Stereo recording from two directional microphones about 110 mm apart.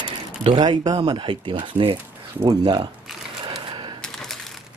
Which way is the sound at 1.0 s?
50° right (ahead or behind).